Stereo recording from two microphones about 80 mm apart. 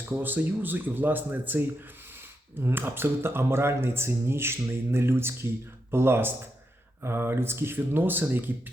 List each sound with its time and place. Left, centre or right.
0.1 s speech: right